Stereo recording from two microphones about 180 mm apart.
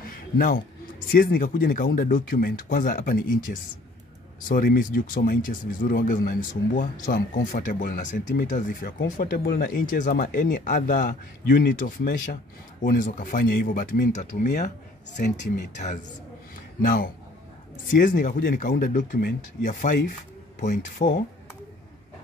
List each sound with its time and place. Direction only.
0.0 s a sound: 50° left (ahead or behind)
1.1 s speech: 55° left (ahead or behind)
15.2 s speech: 65° left (ahead or behind)
15.7 s speech: 40° left (ahead or behind)
21.0 s speech: 40° left (ahead or behind)